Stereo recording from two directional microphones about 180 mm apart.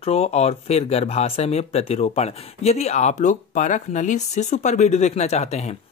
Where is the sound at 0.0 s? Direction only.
35° left (ahead or behind).